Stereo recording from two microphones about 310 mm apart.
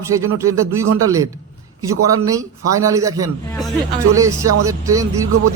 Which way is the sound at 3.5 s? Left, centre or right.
Centre.